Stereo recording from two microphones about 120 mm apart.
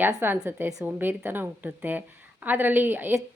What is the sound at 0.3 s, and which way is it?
A woman's voice, 15° right (ahead or behind).